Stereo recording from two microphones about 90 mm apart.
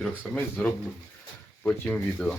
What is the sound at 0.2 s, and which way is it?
Speech, 20° left (ahead or behind).